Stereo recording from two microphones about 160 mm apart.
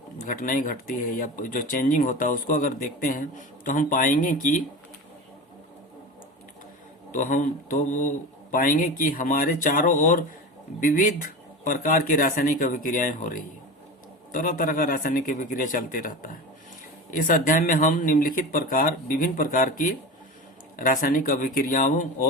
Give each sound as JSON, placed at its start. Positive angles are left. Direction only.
{"t": 0.3, "sound": "speech", "side_deg": 60}
{"t": 7.1, "sound": "speech", "side_deg": 55}
{"t": 14.3, "sound": "speech", "side_deg": 60}